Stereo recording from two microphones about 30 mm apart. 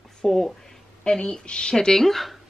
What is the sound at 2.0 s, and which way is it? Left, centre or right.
Speech, centre.